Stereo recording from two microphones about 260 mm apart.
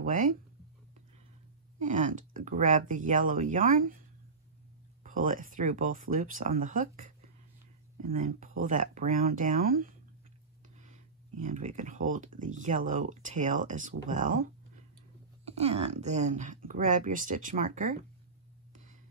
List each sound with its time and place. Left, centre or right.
0.0 s speech: right
1.8 s speech: right
5.0 s speech: right
11.4 s speech: right